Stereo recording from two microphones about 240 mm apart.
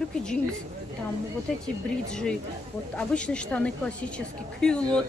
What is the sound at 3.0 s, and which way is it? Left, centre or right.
Speech, centre.